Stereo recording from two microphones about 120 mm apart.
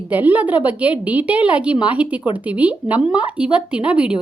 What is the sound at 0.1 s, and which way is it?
A woman's voice, 15° right (ahead or behind).